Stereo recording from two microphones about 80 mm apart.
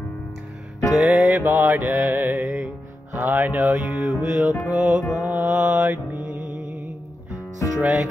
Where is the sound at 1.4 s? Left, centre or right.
Right.